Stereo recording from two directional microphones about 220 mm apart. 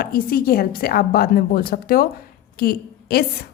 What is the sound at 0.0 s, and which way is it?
A woman's voice, 45° left (ahead or behind).